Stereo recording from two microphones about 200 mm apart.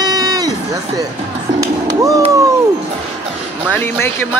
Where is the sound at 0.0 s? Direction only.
20° right (ahead or behind).